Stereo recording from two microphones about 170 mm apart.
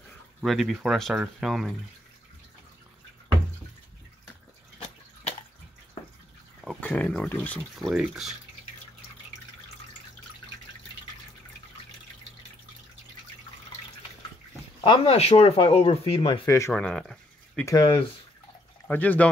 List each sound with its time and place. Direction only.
0.4 s speech: centre (ahead or behind)
6.9 s speech: 5° left (ahead or behind)
14.8 s speech: 35° left (ahead or behind)
16.4 s speech: 15° left (ahead or behind)
16.7 s speech: 5° left (ahead or behind)
17.6 s speech: 30° left (ahead or behind)
18.9 s speech: 10° left (ahead or behind)